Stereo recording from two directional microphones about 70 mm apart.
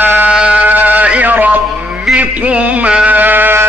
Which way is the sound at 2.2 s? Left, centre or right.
Right.